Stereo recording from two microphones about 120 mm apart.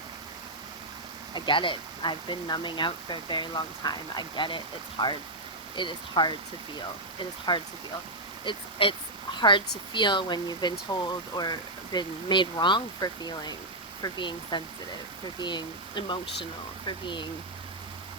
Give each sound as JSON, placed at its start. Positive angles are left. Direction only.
{"t": 1.3, "sound": "speech", "side_deg": 40}